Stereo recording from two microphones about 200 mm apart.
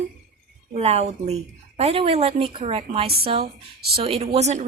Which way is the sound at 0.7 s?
30° right (ahead or behind).